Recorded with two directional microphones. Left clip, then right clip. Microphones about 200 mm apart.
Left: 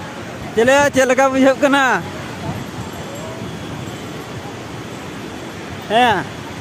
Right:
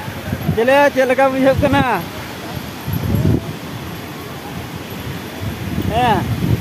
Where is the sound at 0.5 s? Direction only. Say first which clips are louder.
Even; 15° left (ahead or behind).